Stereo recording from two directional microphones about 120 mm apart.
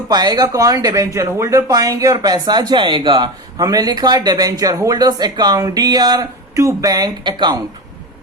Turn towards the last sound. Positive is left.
turn(degrees=-35)  # may be behind; listen again after turning